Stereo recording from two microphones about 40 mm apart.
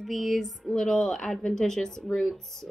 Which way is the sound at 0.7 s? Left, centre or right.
Centre.